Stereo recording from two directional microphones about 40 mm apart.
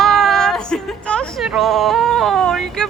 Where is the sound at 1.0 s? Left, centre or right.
Left.